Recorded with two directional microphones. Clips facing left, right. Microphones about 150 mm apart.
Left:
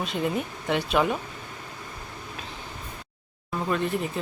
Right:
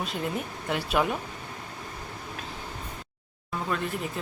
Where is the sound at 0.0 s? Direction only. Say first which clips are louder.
Left 4 dB; centre (ahead or behind).